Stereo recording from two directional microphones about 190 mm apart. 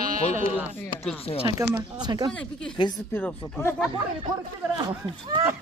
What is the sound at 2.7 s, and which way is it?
Speech, 25° left (ahead or behind).